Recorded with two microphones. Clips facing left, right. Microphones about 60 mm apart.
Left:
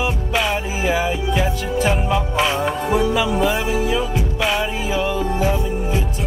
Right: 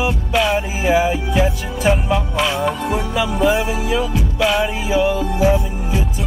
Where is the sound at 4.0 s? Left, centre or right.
Left.